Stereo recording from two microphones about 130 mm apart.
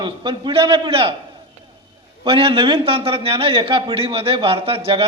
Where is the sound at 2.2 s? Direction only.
45° right (ahead or behind).